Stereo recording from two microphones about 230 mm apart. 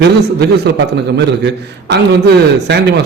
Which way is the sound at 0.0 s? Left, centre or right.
Right.